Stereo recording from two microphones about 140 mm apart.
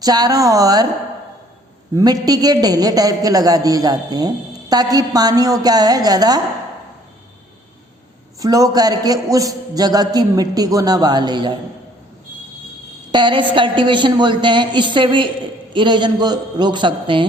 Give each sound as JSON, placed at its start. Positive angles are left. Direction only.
{"t": 0.0, "sound": "a man's voice", "side_deg": -30}
{"t": 2.0, "sound": "a man's voice", "side_deg": -25}
{"t": 8.4, "sound": "a man's voice", "side_deg": -25}
{"t": 13.1, "sound": "a woman's voice", "side_deg": -35}